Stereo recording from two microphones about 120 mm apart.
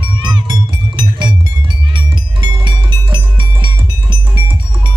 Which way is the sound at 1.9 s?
40° right (ahead or behind).